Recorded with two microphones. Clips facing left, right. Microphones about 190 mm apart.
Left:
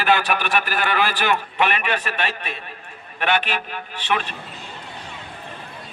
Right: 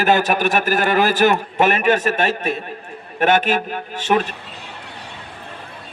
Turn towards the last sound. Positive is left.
turn(degrees=-45)  # may be behind; listen again after turning